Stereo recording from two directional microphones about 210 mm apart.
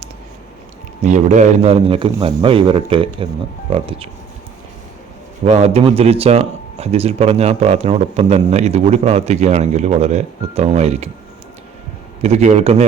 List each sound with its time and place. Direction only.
1.0 s speech: 35° right (ahead or behind)
5.5 s speech: 30° right (ahead or behind)
12.2 s speech: 30° right (ahead or behind)